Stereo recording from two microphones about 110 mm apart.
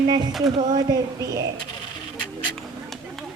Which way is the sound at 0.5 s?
40° right (ahead or behind).